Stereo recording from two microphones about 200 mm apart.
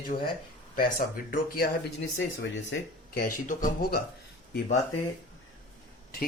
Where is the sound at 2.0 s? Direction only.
70° left (ahead or behind).